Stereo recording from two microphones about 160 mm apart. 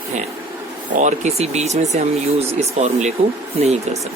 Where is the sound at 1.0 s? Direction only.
45° right (ahead or behind).